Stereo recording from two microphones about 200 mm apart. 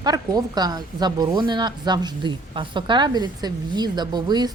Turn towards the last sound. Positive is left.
turn(degrees=-20)  # may be behind; listen again after turning